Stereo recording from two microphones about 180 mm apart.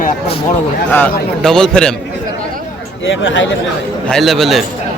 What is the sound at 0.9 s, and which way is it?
Speech, 5° left (ahead or behind).